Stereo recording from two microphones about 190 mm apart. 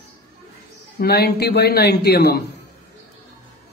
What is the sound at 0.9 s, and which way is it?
Speech, 55° left (ahead or behind).